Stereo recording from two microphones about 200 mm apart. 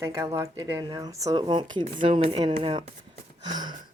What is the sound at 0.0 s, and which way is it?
Speech, 15° right (ahead or behind).